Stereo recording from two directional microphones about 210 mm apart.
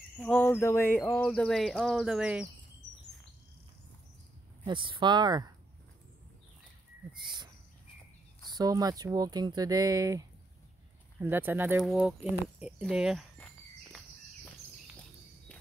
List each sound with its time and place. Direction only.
0.2 s a sound: 5° left (ahead or behind)
4.6 s speech: 25° right (ahead or behind)
7.2 s speech: 20° right (ahead or behind)
8.5 s speech: 20° right (ahead or behind); by 13.5 s centre (ahead or behind)